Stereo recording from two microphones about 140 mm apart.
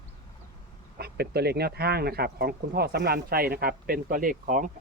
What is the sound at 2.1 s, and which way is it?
Speech, 90° right.